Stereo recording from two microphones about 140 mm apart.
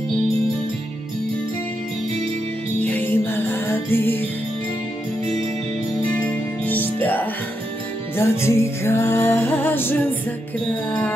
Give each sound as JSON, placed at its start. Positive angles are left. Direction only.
{"t": 2.8, "sound": "music", "side_deg": 15}
{"t": 6.2, "sound": "music", "side_deg": 10}